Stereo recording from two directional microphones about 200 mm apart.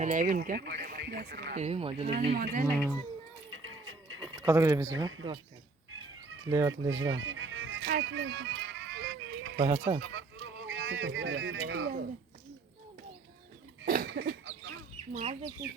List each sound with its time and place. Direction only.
0.0 s speech: 40° right (ahead or behind)
1.5 s speech: 30° right (ahead or behind)
2.3 s speech: 50° right (ahead or behind)
2.7 s speech: 5° left (ahead or behind)
3.5 s a sound: 85° right
4.4 s speech: 15° right (ahead or behind)
5.9 s bird: 85° right
6.5 s speech: 15° right (ahead or behind)
7.2 s music: 85° right; by 9.6 s 70° right (ahead or behind)
9.6 s speech: 15° right (ahead or behind)
10.0 s speech: 65° right (ahead or behind)
13.8 s cough: 50° right (ahead or behind); by 14.7 s 65° right (ahead or behind)
15.1 s speech: 30° right (ahead or behind)